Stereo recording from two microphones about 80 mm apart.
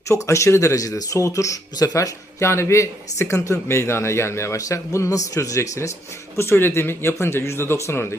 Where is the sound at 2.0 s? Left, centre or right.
Left.